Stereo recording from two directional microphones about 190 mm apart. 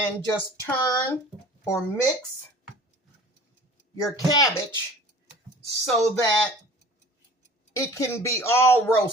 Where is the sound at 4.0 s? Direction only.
20° left (ahead or behind).